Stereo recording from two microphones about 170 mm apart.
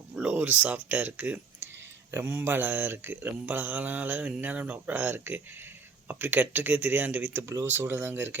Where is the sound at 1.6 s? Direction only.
90° right.